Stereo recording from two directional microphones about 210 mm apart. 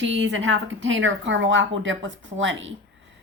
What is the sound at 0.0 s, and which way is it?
A woman's voice, 60° right (ahead or behind).